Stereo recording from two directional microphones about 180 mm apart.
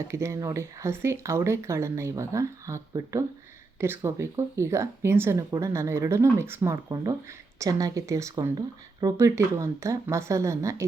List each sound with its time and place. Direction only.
0.1 s speech: 15° right (ahead or behind)